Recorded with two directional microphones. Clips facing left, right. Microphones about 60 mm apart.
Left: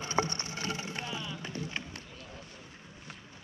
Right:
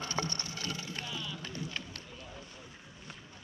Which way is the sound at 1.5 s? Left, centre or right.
Left.